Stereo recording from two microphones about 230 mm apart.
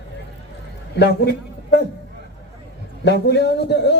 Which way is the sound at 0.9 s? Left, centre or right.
Left.